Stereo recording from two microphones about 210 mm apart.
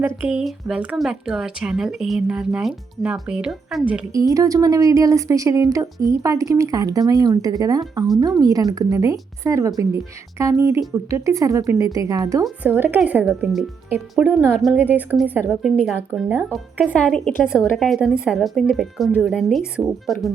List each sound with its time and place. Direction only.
0.2 s speech: 5° right (ahead or behind)
4.1 s speech: 15° right (ahead or behind)